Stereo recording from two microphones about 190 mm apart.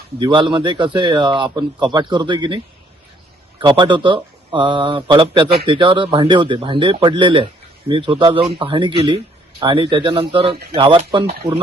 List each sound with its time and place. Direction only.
0.2 s a man's voice: 25° right (ahead or behind)
3.6 s a man's voice: 25° right (ahead or behind)